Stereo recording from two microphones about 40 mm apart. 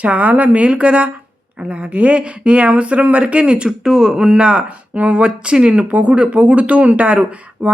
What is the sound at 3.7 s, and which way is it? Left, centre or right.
Speech, centre.